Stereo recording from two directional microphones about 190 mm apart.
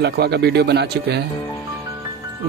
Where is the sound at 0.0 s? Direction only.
60° right (ahead or behind).